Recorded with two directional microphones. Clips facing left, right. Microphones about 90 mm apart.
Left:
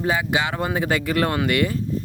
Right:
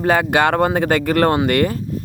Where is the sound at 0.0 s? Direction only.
55° right (ahead or behind).